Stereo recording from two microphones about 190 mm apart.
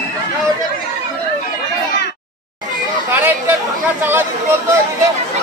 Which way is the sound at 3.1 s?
10° right (ahead or behind).